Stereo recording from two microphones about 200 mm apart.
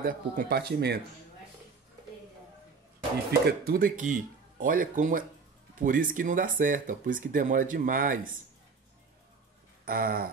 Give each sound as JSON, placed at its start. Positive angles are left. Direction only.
{"t": 0.0, "sound": "speech", "side_deg": -45}
{"t": 3.3, "sound": "speech", "side_deg": -45}
{"t": 9.8, "sound": "speech", "side_deg": -45}